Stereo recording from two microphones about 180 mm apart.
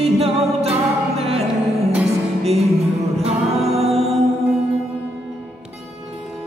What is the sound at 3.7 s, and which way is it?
Music, 35° right (ahead or behind).